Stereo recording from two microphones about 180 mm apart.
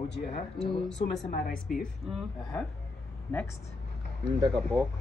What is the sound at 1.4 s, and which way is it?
Speech, centre (ahead or behind).